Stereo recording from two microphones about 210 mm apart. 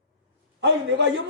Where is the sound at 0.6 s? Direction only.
65° right (ahead or behind).